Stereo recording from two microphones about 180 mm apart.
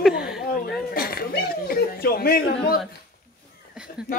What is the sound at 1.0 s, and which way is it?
Speech, 55° left (ahead or behind).